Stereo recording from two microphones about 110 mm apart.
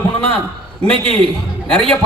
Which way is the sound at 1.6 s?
5° left (ahead or behind).